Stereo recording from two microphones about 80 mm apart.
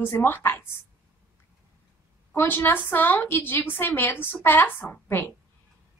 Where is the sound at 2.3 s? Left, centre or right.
Left.